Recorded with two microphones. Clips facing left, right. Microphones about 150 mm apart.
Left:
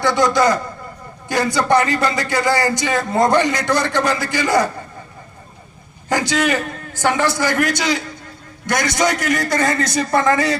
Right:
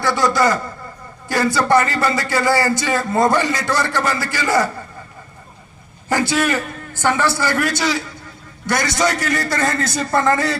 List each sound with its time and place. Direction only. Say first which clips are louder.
0.0 s speech: left 1 dB; 20° left (ahead or behind)
6.1 s a man's voice: even; 15° left (ahead or behind)